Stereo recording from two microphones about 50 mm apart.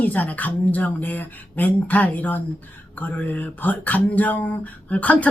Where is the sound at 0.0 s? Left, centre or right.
Left.